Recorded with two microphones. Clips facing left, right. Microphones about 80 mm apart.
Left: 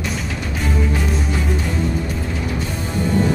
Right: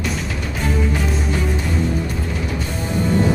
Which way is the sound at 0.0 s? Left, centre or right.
Centre.